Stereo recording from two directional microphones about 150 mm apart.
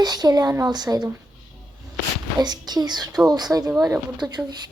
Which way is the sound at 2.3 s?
25° right (ahead or behind).